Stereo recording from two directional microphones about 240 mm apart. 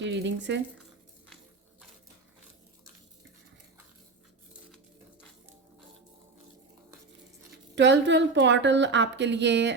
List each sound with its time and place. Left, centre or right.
0.0 s speech: right
7.8 s a woman's voice: right